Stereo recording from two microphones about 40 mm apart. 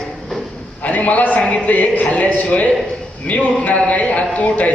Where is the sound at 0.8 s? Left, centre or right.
Left.